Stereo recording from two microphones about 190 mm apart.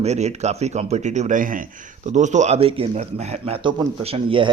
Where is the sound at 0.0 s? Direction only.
35° right (ahead or behind).